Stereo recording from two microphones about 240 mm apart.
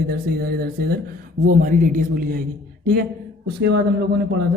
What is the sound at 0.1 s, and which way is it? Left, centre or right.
A man's voice, right.